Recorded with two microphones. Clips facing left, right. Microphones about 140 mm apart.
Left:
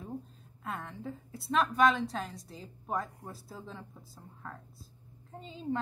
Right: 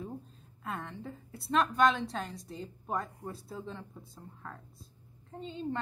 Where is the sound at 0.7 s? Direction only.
Centre (ahead or behind).